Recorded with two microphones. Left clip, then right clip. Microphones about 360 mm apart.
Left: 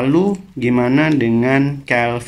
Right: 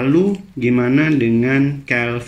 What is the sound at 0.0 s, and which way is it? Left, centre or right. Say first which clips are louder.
Speech: even; centre.